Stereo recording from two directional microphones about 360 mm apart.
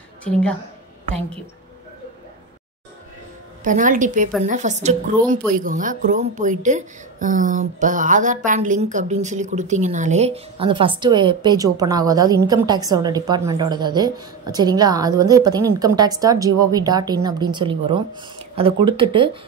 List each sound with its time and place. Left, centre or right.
0.2 s a woman's voice: centre
3.6 s a woman's voice: right